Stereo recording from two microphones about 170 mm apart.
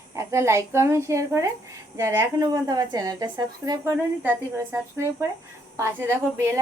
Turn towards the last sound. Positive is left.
turn(degrees=-15)  # may be behind; listen again after turning